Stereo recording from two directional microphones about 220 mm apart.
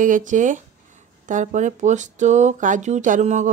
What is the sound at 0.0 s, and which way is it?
Speech, 35° right (ahead or behind).